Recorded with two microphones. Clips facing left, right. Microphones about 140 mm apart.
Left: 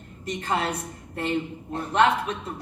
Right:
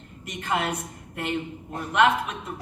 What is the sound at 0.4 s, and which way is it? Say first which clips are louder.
Speech: even; 35° left (ahead or behind).